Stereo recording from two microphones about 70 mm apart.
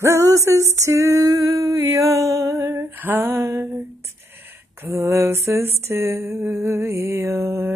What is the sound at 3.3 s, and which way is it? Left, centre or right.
Music, right.